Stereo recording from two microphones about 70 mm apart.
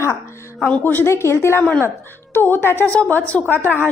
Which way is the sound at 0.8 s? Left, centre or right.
Left.